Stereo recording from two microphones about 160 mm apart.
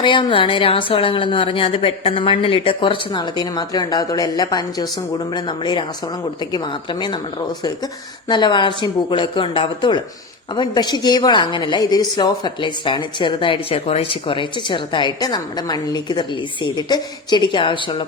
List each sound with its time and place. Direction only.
0.0 s a woman's voice: 30° left (ahead or behind)
8.3 s a woman's voice: 30° left (ahead or behind)